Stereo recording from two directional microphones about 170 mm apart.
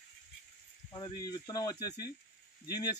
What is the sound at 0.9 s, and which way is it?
Speech, 25° left (ahead or behind).